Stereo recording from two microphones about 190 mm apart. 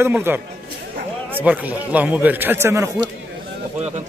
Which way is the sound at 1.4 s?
10° right (ahead or behind).